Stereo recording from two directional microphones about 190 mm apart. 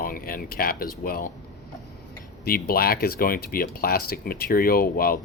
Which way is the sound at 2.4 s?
50° left (ahead or behind).